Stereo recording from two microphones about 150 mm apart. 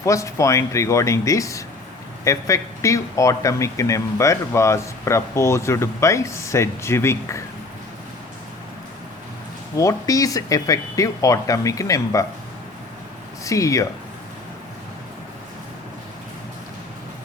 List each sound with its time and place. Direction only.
0.0 s speech: 20° left (ahead or behind)
9.7 s speech: 20° left (ahead or behind)
13.4 s speech: 20° left (ahead or behind)